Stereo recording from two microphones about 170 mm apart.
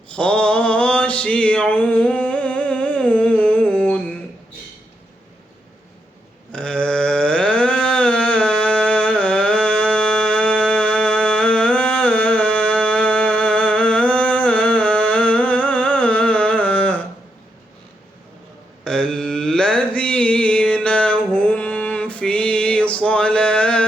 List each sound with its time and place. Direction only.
0.1 s mantra: 5° left (ahead or behind)
6.5 s a sound: 5° left (ahead or behind)
18.9 s mantra: 5° left (ahead or behind)